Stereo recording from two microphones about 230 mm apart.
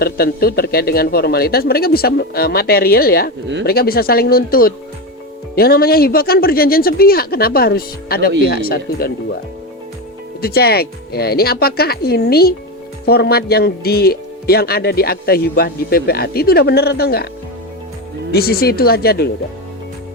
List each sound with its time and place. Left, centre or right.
0.0 s a man's voice: left
10.4 s a man's voice: left
18.3 s speech: left